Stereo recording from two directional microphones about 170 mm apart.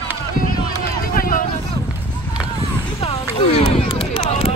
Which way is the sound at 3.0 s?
35° left (ahead or behind).